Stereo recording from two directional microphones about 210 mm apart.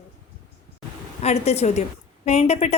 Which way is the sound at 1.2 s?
30° left (ahead or behind).